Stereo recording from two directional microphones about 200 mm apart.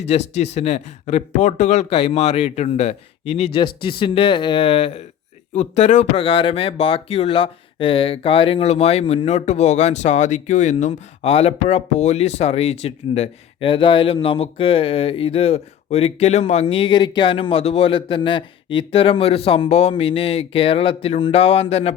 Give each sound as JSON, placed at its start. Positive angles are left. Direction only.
{"t": 0.3, "sound": "speech", "side_deg": 35}